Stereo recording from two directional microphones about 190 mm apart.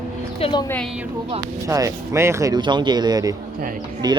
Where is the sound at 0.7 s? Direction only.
5° left (ahead or behind).